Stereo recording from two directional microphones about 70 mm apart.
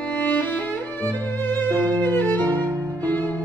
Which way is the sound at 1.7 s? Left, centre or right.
Right.